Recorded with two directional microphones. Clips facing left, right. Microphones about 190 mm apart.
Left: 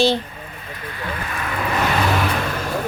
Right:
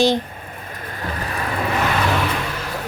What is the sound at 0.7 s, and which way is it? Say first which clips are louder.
Vehicle: even; 45° right (ahead or behind).